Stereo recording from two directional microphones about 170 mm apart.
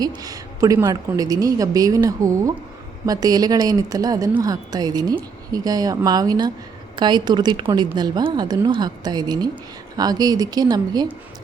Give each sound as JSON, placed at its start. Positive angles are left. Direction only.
{"t": 0.0, "sound": "a woman's voice", "side_deg": -20}